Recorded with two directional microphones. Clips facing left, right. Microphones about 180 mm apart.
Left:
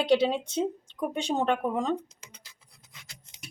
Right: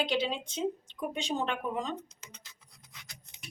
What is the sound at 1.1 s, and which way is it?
Speech, 55° left (ahead or behind).